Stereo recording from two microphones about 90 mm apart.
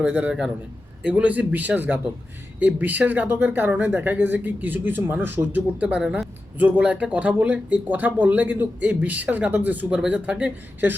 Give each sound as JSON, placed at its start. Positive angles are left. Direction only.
{"t": 0.0, "sound": "speech", "side_deg": -20}
{"t": 0.3, "sound": "speech", "side_deg": -10}